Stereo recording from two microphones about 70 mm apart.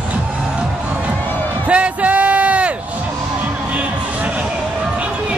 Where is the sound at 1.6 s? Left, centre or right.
Centre.